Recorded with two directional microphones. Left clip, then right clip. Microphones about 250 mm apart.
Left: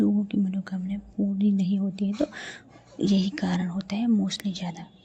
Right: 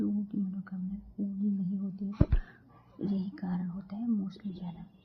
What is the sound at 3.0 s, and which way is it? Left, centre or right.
Speech, left.